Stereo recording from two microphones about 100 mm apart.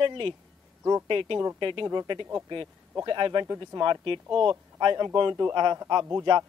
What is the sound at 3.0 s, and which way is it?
Speech, 50° right (ahead or behind).